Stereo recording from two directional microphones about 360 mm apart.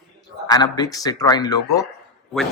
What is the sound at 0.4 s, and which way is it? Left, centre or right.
Speech, centre.